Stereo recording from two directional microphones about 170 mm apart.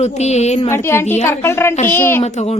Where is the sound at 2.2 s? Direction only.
40° left (ahead or behind).